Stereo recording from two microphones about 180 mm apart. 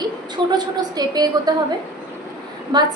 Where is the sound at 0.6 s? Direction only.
20° right (ahead or behind).